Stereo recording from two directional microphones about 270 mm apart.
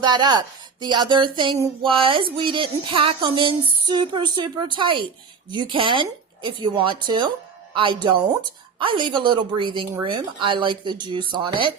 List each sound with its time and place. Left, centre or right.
0.0 s a woman's voice: centre